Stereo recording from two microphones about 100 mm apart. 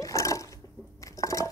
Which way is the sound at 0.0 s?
30° left (ahead or behind).